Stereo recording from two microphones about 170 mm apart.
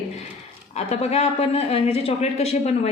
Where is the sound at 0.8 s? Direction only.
40° left (ahead or behind).